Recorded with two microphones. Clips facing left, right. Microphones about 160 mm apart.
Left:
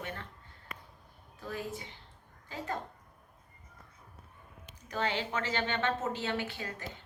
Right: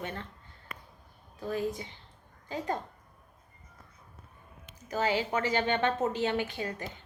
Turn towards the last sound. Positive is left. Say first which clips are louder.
# right 5 dB
turn(degrees=-20)  # may be behind; listen again after turning